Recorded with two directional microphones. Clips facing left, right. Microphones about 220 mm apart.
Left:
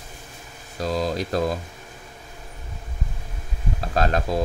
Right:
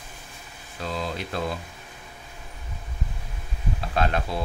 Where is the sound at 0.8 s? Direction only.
40° left (ahead or behind).